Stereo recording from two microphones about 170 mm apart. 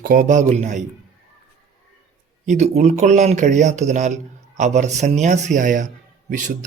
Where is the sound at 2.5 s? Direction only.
40° right (ahead or behind).